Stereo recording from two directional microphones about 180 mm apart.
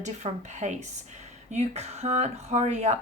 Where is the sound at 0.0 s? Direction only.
40° right (ahead or behind).